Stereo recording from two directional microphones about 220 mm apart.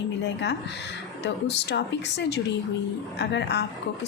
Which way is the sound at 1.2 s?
50° left (ahead or behind).